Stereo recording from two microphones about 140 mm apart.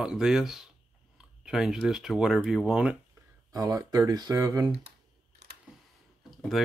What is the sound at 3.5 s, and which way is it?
Speech, 25° right (ahead or behind).